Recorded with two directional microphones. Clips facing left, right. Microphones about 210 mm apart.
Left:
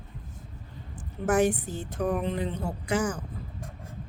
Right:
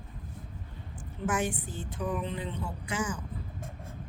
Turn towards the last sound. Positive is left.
turn(degrees=40)  # may be behind; listen again after turning